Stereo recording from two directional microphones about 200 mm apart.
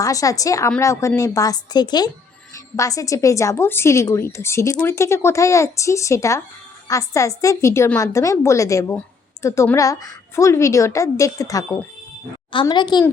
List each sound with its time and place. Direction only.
0.0 s a woman's voice: 15° left (ahead or behind)